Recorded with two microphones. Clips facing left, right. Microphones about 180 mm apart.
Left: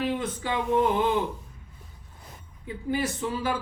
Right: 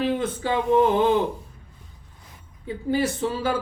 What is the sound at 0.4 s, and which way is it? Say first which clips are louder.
Speech: right 5 dB; 30° right (ahead or behind).